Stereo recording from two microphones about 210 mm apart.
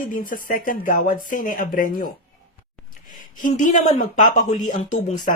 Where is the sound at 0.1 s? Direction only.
40° left (ahead or behind).